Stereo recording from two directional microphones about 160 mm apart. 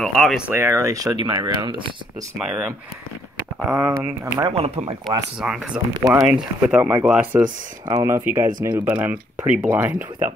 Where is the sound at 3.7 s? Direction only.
20° right (ahead or behind).